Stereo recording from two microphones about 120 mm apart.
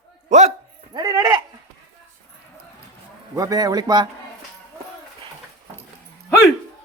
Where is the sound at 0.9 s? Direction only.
30° right (ahead or behind).